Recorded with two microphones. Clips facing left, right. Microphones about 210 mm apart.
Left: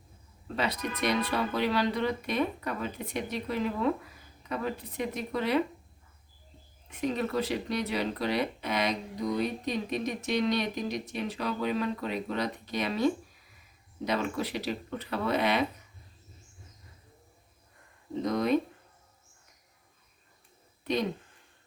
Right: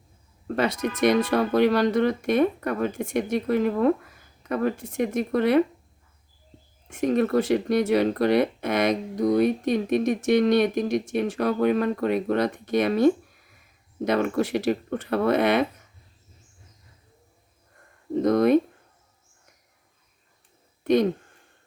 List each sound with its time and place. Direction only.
0.4 s speech: 50° right (ahead or behind)
6.8 s speech: 50° right (ahead or behind)
18.1 s a sound: 50° right (ahead or behind)
20.8 s speech: 55° right (ahead or behind)